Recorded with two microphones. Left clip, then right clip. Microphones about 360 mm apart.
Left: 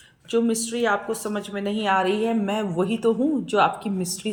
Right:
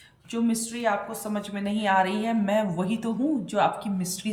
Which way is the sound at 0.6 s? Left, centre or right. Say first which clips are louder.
Left 4 dB; right.